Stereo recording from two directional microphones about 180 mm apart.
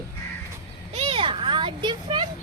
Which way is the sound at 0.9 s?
35° right (ahead or behind).